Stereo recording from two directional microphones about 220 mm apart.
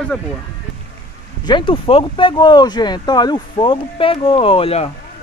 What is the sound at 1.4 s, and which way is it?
Speech, 20° left (ahead or behind).